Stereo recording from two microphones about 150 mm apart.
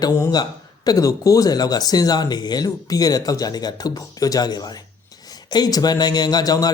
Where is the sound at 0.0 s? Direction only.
20° left (ahead or behind).